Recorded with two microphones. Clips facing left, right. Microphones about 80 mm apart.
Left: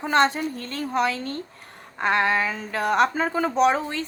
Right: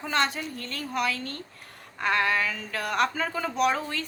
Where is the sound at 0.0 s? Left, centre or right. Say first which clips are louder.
Left 7 dB; left.